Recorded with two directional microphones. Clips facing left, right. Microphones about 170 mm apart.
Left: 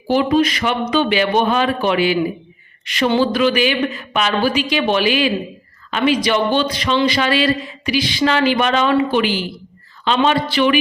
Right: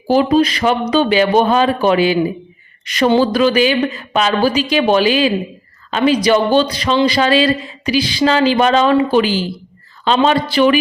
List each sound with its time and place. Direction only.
0.1 s a woman's voice: 35° right (ahead or behind)